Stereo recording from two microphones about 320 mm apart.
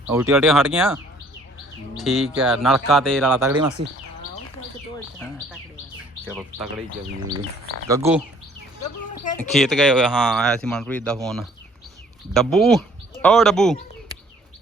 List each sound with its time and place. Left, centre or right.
0.1 s speech: centre
2.0 s speech: centre
3.8 s speech: right
6.2 s speech: centre
7.9 s speech: centre
9.4 s speech: centre